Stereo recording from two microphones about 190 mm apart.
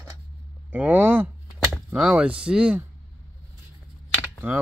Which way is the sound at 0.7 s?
10° right (ahead or behind).